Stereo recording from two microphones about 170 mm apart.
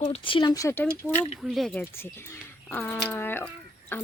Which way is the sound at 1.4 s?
Centre (ahead or behind).